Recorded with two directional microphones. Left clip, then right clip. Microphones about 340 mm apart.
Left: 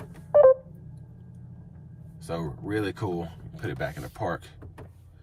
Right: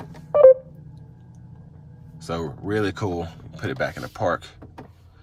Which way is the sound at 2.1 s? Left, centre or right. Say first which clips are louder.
Right 5 dB; centre.